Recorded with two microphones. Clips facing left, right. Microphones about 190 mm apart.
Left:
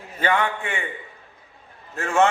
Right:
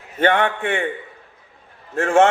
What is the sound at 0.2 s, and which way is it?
Speech, 60° right (ahead or behind).